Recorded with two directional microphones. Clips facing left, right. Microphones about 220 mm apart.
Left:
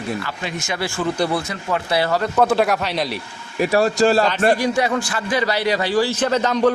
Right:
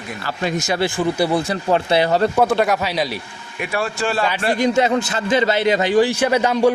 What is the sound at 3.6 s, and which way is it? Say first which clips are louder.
Speech: left 7 dB; 40° left (ahead or behind).